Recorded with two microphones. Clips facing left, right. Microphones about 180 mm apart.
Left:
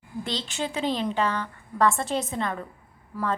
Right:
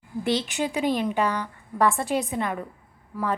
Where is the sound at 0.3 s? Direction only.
15° right (ahead or behind).